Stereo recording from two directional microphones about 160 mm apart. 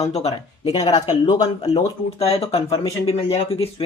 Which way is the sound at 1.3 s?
25° left (ahead or behind).